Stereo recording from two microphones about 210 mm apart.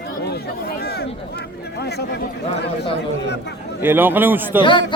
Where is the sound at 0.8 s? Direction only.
50° left (ahead or behind).